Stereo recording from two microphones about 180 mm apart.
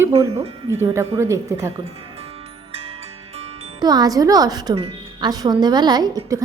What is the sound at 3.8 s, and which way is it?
A woman's voice, 20° right (ahead or behind).